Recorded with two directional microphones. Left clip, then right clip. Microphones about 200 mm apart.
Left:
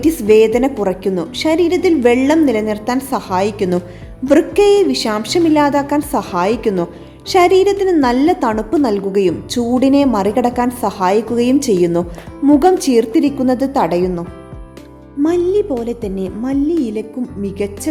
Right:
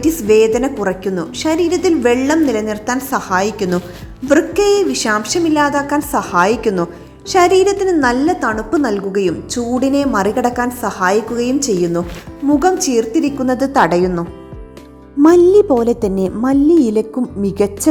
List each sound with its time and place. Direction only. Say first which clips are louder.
0.0 s a woman's voice: left 1 dB; centre (ahead or behind)
15.2 s a woman's voice: right 6 dB; 25° right (ahead or behind)